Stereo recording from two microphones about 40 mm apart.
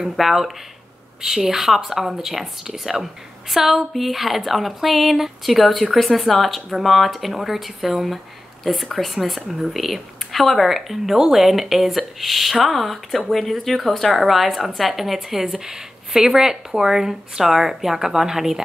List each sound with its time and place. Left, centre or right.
0.0 s speech: centre